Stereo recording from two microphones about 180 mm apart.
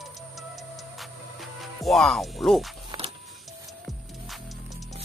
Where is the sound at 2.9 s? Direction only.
20° right (ahead or behind).